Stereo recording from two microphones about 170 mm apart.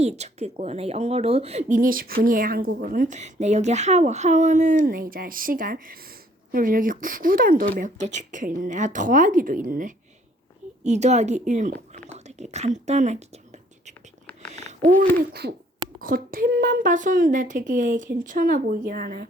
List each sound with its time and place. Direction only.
0.0 s speech: 40° right (ahead or behind)
10.8 s speech: 40° right (ahead or behind)
14.5 s a sound: 40° right (ahead or behind)
14.8 s speech: 60° right (ahead or behind)
16.0 s speech: 55° right (ahead or behind)